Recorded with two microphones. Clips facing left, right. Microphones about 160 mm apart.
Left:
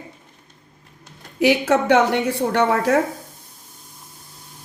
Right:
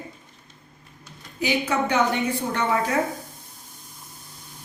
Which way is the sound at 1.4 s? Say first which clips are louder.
Left 7 dB; 90° left.